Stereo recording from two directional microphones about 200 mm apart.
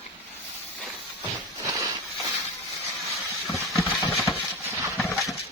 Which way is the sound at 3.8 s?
10° right (ahead or behind).